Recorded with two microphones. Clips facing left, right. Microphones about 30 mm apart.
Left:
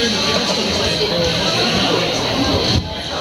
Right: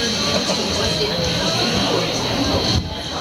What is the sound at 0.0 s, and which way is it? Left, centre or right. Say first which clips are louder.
Music: left 3 dB; centre.